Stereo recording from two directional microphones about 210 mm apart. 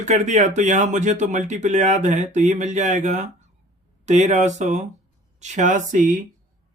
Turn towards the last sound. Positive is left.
turn(degrees=-40)  # may be behind; listen again after turning